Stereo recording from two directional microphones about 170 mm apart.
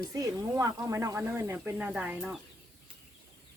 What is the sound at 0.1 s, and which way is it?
Speech, 20° right (ahead or behind).